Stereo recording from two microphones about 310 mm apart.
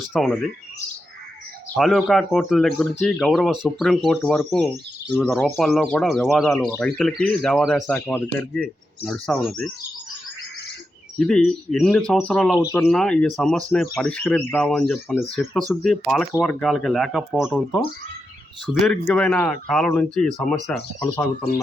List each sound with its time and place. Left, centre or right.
0.1 s speech: centre
1.7 s speech: centre
11.2 s speech: centre
18.9 s speech: centre